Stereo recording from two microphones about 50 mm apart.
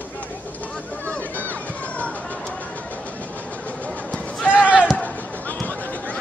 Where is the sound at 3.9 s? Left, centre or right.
Left.